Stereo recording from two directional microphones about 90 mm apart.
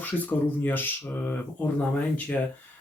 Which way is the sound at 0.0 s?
20° left (ahead or behind).